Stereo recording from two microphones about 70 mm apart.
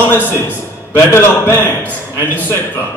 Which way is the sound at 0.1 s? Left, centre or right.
Left.